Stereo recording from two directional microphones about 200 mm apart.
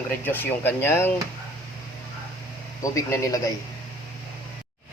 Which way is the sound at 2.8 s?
15° left (ahead or behind).